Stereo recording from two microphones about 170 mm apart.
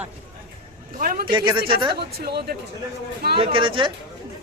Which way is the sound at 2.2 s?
70° right (ahead or behind).